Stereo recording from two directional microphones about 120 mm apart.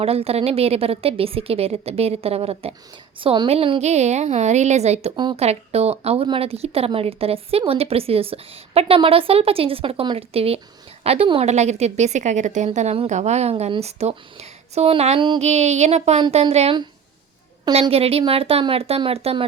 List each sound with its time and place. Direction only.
0.0 s a woman's voice: 55° right (ahead or behind)
3.8 s a woman's voice: 70° right (ahead or behind)
5.1 s a woman's voice: 40° right (ahead or behind)
5.4 s a woman's voice: 60° right (ahead or behind)
17.7 s a woman's voice: 55° right (ahead or behind)